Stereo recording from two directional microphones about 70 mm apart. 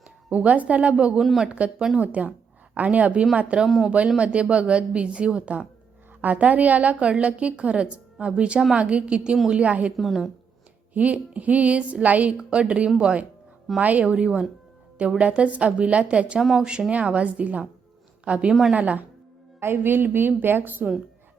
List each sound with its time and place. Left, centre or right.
0.3 s a woman's voice: right
1.2 s speech: centre
1.5 s a woman's voice: centre
1.8 s a woman's voice: centre
2.7 s a woman's voice: right
10.0 s speech: centre
10.9 s a woman's voice: right
16.4 s a woman's voice: centre
19.5 s a woman's voice: right